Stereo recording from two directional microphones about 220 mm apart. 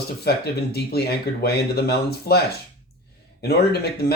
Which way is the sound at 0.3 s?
45° left (ahead or behind).